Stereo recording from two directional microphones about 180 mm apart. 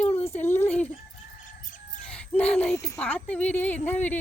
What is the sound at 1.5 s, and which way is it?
Chicken, 45° left (ahead or behind).